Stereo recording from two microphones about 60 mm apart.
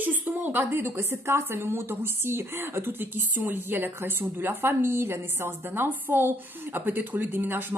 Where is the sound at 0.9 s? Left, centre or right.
Right.